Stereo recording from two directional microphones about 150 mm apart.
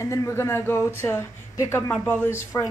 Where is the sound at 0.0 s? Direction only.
20° left (ahead or behind).